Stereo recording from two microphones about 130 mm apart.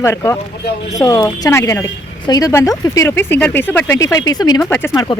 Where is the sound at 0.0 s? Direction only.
20° left (ahead or behind).